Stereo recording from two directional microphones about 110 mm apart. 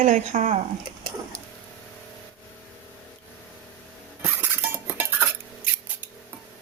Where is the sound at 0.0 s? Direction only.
90° right.